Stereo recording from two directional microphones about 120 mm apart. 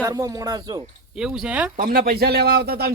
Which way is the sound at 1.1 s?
5° right (ahead or behind).